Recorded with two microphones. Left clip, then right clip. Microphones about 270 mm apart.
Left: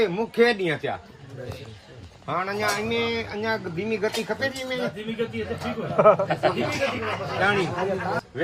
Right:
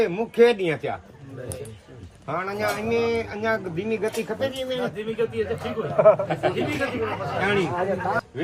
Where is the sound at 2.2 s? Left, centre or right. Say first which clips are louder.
Left 1 dB; centre.